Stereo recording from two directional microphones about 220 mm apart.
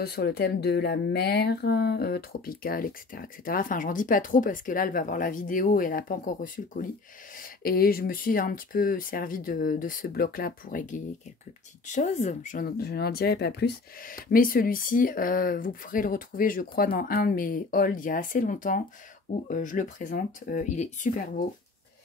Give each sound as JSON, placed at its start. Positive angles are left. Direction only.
{"t": 0.0, "sound": "speech", "side_deg": 45}